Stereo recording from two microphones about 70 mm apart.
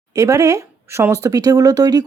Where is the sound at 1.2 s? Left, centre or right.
Right.